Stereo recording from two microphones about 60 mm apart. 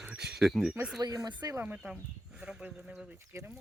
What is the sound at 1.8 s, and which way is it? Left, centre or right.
Speech, centre.